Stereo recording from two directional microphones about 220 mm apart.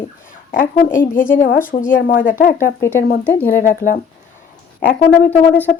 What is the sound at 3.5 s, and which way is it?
Speech, 40° left (ahead or behind).